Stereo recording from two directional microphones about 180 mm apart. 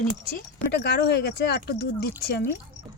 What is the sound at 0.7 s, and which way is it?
Speech, 65° left (ahead or behind).